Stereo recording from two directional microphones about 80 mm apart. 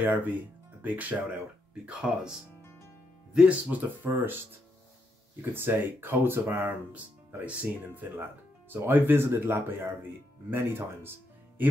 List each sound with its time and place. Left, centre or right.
0.0 s speech: right
3.3 s speech: centre
3.7 s speech: right